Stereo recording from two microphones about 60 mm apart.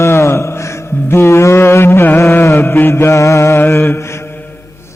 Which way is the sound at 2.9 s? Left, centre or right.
Left.